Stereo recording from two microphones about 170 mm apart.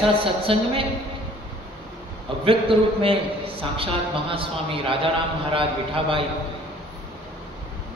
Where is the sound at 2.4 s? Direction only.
35° right (ahead or behind).